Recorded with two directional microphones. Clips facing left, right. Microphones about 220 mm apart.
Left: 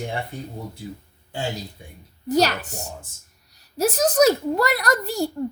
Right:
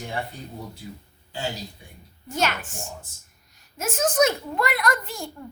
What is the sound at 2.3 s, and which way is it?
A child's voice, 35° left (ahead or behind).